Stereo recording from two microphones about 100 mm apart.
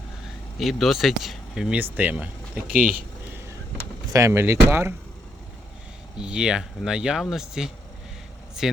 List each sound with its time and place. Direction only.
0.6 s speech: centre (ahead or behind)
1.8 s speech: 15° right (ahead or behind)
4.1 s speech: 25° right (ahead or behind)
6.1 s speech: 10° right (ahead or behind)